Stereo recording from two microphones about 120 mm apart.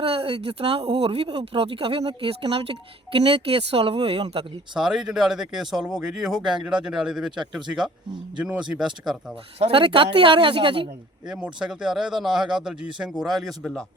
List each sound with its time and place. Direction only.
0.0 s speech: 50° right (ahead or behind)
4.7 s a man's voice: 5° right (ahead or behind)
9.6 s speech: 50° right (ahead or behind)
11.3 s a man's voice: 5° right (ahead or behind)